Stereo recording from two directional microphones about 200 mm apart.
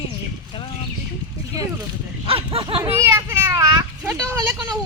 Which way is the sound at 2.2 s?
25° right (ahead or behind).